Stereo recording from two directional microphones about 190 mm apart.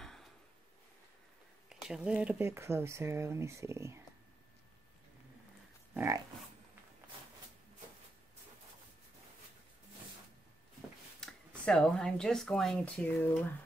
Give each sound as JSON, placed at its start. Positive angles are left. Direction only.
{"t": 0.0, "sound": "drawer open or close", "side_deg": 0}
{"t": 1.7, "sound": "speech", "side_deg": -5}
{"t": 5.9, "sound": "dog", "side_deg": -15}
{"t": 11.1, "sound": "speech", "side_deg": 5}